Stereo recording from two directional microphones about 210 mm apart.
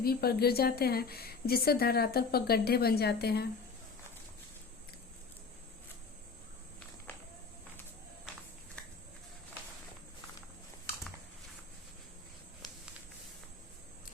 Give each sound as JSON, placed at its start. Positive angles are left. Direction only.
{"t": 0.0, "sound": "speech", "side_deg": 45}